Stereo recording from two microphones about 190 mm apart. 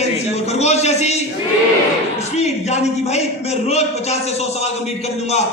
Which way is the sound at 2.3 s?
35° left (ahead or behind).